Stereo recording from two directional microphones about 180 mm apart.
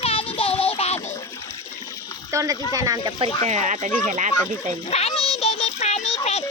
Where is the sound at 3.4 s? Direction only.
40° right (ahead or behind).